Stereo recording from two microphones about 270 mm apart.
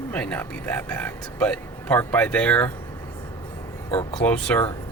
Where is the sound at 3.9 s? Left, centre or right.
Left.